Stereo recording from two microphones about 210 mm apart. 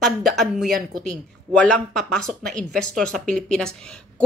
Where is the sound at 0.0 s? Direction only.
Centre (ahead or behind).